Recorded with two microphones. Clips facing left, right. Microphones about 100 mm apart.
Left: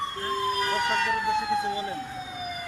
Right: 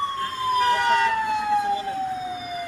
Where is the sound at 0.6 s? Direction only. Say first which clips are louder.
Right 6 dB; 75° right (ahead or behind).